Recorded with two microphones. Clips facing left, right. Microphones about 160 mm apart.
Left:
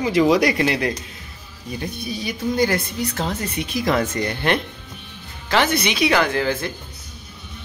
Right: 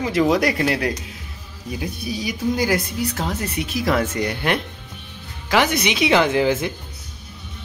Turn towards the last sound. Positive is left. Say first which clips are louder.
# right 3 dB
turn(degrees=-15)  # may be behind; listen again after turning